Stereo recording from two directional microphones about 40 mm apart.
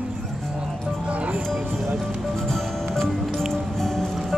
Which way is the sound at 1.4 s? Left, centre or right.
Centre.